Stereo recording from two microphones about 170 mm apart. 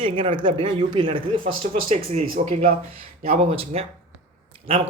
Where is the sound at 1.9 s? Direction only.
40° right (ahead or behind).